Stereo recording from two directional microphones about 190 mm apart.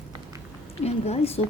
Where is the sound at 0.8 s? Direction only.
35° left (ahead or behind).